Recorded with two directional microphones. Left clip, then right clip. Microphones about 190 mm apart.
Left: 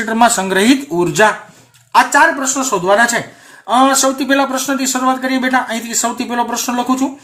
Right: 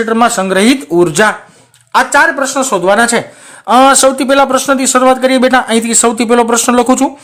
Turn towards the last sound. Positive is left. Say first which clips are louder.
# right 8 dB
turn(degrees=-55)  # may be behind; listen again after turning